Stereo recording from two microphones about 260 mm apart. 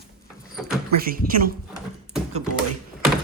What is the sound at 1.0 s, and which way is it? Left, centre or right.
Speech, right.